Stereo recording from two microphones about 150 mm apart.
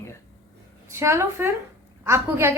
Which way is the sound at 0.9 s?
20° right (ahead or behind).